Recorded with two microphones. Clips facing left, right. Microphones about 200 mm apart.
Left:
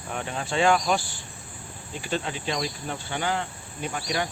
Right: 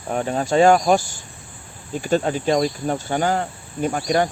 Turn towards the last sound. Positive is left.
turn(degrees=-45)  # may be behind; listen again after turning